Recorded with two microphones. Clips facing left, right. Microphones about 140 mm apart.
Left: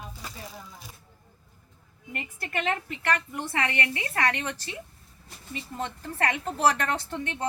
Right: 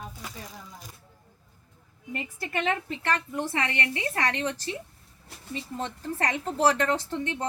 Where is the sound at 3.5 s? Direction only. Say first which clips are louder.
Left 4 dB; 25° right (ahead or behind).